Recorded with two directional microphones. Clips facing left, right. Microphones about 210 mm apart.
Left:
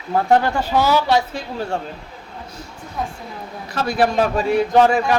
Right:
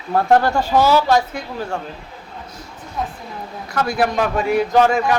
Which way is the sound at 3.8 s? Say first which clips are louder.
Left 1 dB; 30° left (ahead or behind).